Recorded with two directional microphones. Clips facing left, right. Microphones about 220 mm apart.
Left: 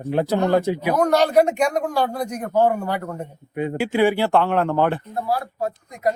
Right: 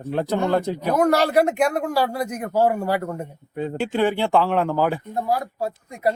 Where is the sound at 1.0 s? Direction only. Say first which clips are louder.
Left 1 dB; 10° right (ahead or behind).